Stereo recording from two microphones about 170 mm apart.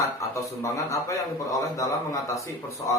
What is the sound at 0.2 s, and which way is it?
A man's voice, 20° left (ahead or behind).